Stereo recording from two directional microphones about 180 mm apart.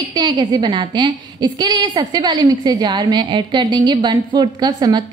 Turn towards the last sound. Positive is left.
turn(degrees=-25)  # may be behind; listen again after turning